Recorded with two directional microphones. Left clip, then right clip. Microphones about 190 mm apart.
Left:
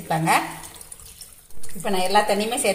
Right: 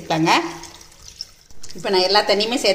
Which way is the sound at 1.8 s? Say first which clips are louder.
Right 3 dB; 35° right (ahead or behind).